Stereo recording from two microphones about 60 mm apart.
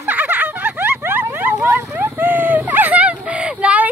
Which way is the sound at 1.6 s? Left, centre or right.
Right.